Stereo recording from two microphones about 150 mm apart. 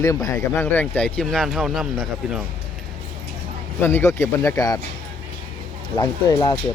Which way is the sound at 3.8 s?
15° left (ahead or behind).